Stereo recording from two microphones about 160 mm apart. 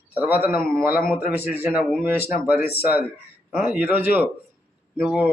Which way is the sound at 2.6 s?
80° left.